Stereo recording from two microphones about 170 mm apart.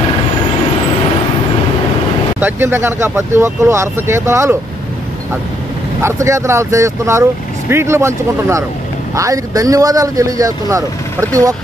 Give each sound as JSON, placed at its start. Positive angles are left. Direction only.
{"t": 2.4, "sound": "speech", "side_deg": -15}
{"t": 6.0, "sound": "a man's voice", "side_deg": -15}